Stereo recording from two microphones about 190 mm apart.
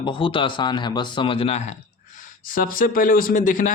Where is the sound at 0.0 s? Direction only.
25° left (ahead or behind).